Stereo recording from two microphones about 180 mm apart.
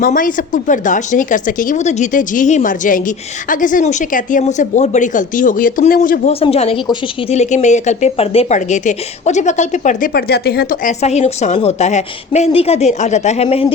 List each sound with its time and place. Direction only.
0.0 s speech: 50° left (ahead or behind)
6.4 s a woman's voice: 35° left (ahead or behind)
10.2 s a woman's voice: 60° left (ahead or behind); by 13.7 s 35° left (ahead or behind)